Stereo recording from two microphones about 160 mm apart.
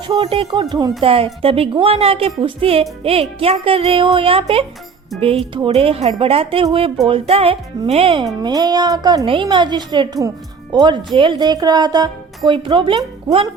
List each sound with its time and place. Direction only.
0.1 s speech: 30° right (ahead or behind)